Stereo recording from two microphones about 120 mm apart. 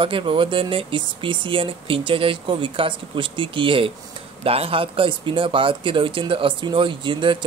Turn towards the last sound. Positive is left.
turn(degrees=-40)  # may be behind; listen again after turning